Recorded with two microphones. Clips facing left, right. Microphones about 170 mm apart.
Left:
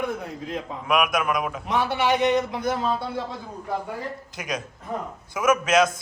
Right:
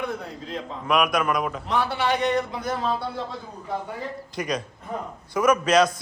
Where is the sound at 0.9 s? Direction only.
Centre (ahead or behind).